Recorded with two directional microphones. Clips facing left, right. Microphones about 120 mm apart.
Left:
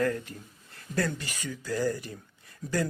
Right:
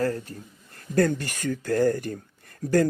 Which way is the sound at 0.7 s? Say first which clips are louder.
Right 8 dB; 50° right (ahead or behind).